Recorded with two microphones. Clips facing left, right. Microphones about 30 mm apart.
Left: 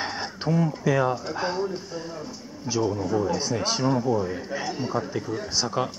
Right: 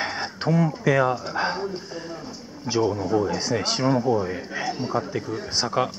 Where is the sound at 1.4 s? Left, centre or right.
Right.